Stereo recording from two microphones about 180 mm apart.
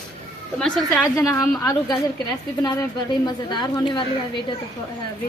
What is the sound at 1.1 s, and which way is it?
Speech, 15° left (ahead or behind).